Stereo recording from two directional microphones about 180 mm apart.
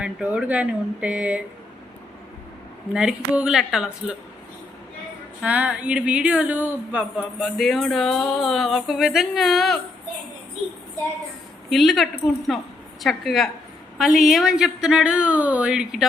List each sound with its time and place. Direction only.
0.0 s speech: 5° right (ahead or behind)
2.9 s speech: 5° right (ahead or behind)
5.4 s speech: 5° right (ahead or behind)
11.7 s speech: centre (ahead or behind)